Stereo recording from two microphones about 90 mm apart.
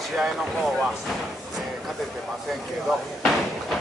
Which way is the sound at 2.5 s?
Centre (ahead or behind).